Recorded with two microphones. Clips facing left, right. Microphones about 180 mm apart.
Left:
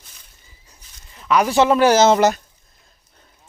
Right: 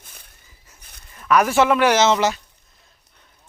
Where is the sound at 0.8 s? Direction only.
60° right (ahead or behind).